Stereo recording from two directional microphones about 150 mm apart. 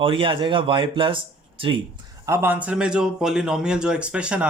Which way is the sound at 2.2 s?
15° right (ahead or behind).